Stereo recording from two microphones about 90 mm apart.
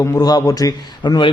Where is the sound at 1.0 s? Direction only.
60° left (ahead or behind).